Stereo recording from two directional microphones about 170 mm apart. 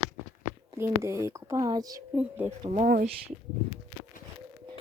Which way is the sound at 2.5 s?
40° right (ahead or behind).